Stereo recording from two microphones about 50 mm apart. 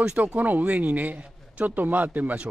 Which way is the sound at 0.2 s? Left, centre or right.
Right.